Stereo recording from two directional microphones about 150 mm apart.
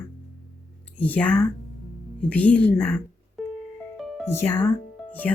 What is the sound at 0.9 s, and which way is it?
Speech, 10° left (ahead or behind).